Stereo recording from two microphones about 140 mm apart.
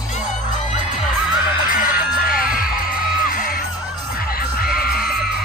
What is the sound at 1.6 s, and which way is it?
Music, 75° left (ahead or behind).